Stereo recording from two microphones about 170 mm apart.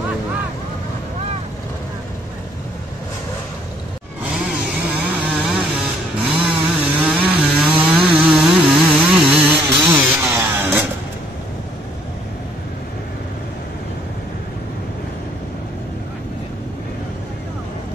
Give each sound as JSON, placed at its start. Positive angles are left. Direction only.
{"t": 4.2, "sound": "vehicle", "side_deg": -10}
{"t": 6.1, "sound": "chainsaw", "side_deg": -5}